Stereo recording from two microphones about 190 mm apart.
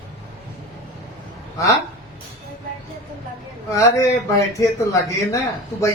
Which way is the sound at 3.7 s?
15° left (ahead or behind).